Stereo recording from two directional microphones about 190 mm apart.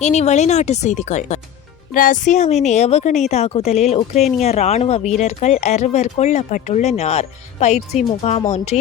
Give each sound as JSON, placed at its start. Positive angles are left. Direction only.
{"t": 0.0, "sound": "speech", "side_deg": 35}